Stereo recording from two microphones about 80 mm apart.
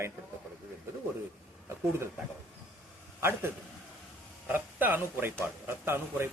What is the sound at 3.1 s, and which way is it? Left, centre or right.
A man's voice, right.